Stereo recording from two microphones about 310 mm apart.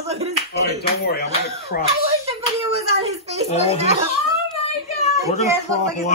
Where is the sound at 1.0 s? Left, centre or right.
Left.